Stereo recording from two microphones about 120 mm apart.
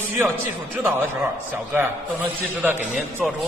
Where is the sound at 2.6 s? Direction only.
15° right (ahead or behind).